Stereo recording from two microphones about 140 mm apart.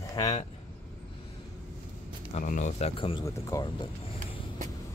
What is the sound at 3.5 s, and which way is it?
Speech, 25° left (ahead or behind).